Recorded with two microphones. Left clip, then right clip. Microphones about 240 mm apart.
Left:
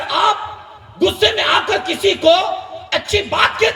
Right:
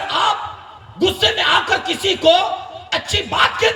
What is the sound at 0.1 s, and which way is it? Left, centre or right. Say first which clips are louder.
Snicker: left 3 dB; left.